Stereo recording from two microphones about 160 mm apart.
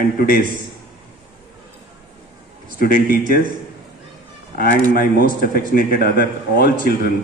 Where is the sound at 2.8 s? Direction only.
65° left (ahead or behind).